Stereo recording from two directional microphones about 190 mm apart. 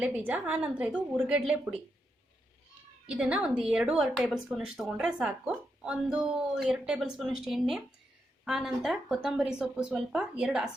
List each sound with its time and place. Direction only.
0.0 s a woman's voice: 10° right (ahead or behind)
3.1 s a woman's voice: 5° right (ahead or behind)